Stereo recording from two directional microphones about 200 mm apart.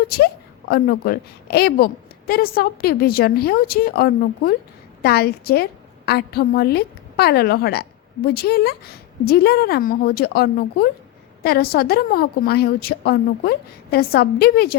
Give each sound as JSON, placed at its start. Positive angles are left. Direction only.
{"t": 0.7, "sound": "a woman's voice", "side_deg": 50}